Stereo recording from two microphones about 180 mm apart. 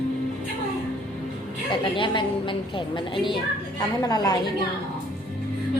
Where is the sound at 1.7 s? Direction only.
25° left (ahead or behind).